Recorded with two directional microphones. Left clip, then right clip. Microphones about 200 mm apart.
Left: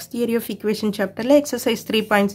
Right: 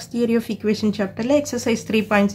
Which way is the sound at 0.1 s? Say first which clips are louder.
Right 1 dB; 30° left (ahead or behind).